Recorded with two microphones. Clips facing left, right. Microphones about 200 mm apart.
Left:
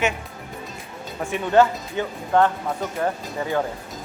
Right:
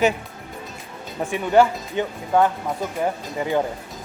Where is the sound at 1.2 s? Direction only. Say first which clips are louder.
Right 1 dB; 15° right (ahead or behind).